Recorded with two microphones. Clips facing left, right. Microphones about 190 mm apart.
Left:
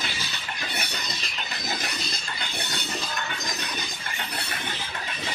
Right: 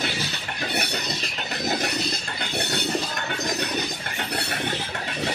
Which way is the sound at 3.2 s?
60° right (ahead or behind).